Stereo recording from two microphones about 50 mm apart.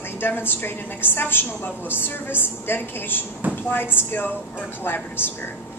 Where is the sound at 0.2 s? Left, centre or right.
Left.